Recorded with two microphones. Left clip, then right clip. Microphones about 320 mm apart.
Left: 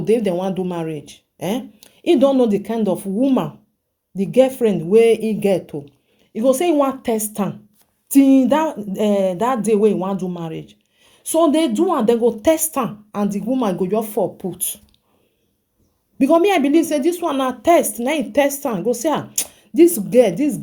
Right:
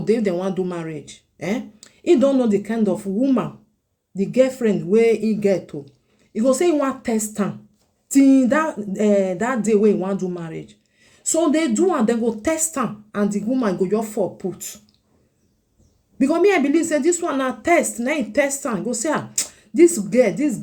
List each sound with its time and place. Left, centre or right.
0.0 s a woman's voice: centre
8.3 s a woman's voice: centre
16.1 s speech: centre